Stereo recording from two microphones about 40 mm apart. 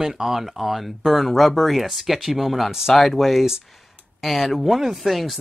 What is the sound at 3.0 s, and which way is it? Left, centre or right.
Speech, centre.